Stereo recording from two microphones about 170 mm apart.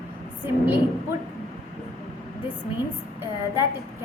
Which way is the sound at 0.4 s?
10° right (ahead or behind).